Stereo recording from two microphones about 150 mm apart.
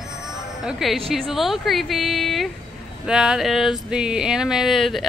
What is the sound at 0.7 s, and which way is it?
Speech, centre (ahead or behind).